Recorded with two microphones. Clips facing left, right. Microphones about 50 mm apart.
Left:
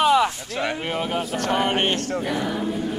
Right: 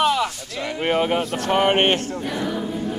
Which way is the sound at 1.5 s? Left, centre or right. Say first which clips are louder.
Right 5 dB; right.